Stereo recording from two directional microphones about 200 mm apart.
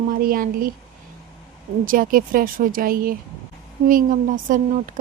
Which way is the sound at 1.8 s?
45° right (ahead or behind).